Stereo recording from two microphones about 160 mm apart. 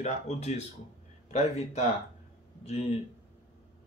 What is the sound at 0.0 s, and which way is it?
Speech, 45° left (ahead or behind).